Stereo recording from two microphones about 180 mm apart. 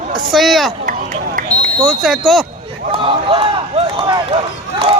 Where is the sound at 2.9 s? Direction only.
30° right (ahead or behind).